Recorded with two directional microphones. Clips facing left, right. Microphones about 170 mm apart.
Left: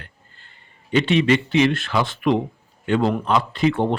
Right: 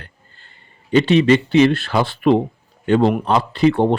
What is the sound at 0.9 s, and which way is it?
A man's voice, 35° right (ahead or behind).